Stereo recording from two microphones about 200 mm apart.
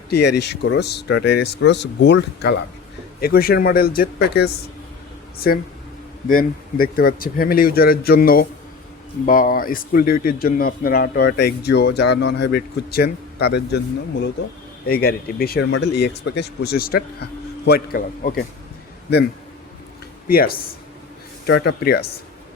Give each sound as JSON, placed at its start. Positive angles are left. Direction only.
{"t": 0.1, "sound": "speech", "side_deg": 55}
{"t": 20.2, "sound": "speech", "side_deg": 45}